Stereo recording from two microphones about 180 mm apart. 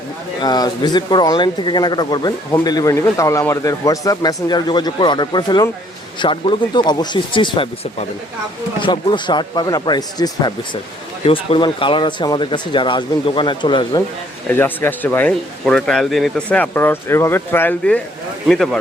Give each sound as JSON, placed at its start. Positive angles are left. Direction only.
{"t": 0.4, "sound": "speech", "side_deg": 20}
{"t": 14.5, "sound": "speech", "side_deg": 10}